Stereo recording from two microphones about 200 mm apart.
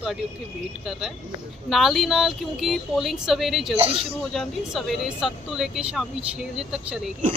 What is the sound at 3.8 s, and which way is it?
Speech, 30° right (ahead or behind).